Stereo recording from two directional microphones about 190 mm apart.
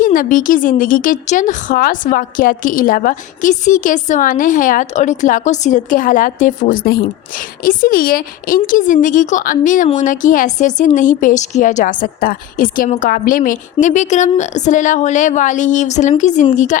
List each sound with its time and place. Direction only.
0.0 s a woman's voice: 45° left (ahead or behind)